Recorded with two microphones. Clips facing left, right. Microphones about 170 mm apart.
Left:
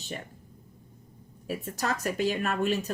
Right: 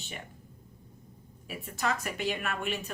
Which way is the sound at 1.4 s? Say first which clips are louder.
Left 2 dB; 40° left (ahead or behind).